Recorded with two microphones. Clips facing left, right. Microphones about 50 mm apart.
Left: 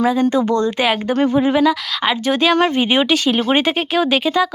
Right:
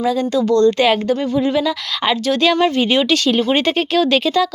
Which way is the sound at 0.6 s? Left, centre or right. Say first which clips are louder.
Right 4 dB; centre.